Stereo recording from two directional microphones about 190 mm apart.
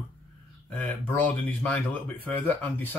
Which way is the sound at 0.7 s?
10° left (ahead or behind).